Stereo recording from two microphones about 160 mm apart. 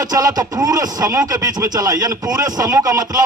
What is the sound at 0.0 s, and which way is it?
Speech, 20° right (ahead or behind).